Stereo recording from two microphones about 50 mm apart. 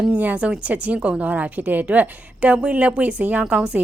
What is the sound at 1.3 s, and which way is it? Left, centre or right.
A woman's voice, right.